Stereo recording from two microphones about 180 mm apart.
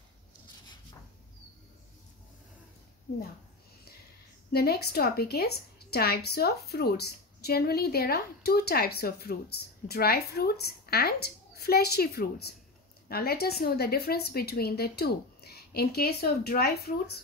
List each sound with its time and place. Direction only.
4.5 s a woman's voice: 60° left (ahead or behind)